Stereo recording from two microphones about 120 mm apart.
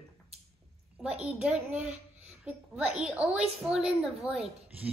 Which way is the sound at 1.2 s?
5° right (ahead or behind).